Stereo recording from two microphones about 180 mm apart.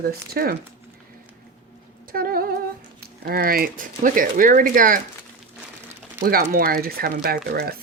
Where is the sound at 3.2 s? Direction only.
55° right (ahead or behind).